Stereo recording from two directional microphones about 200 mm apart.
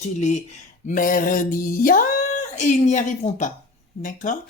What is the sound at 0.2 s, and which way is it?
Speech, 35° left (ahead or behind).